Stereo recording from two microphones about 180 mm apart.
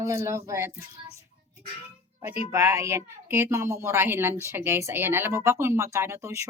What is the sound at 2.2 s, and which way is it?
Speech, 10° right (ahead or behind).